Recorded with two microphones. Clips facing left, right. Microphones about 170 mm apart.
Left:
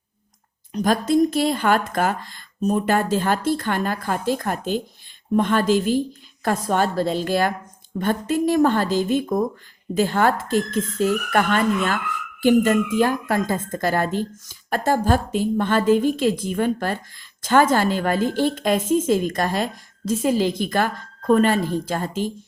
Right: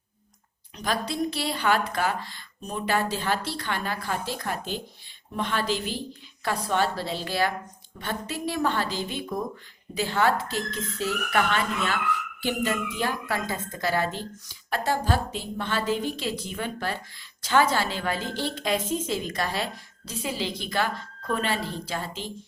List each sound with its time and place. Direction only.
0.7 s speech: 45° left (ahead or behind)